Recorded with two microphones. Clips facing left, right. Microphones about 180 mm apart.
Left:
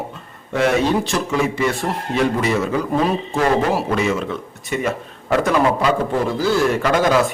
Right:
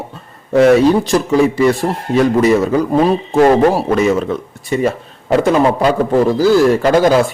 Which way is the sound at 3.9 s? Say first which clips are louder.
Right 6 dB; 40° right (ahead or behind).